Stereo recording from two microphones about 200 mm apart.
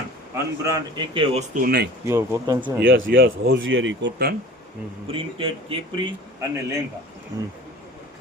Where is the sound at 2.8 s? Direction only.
70° right (ahead or behind).